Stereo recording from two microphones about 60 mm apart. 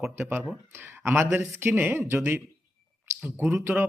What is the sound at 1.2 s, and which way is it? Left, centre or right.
A man's voice, right.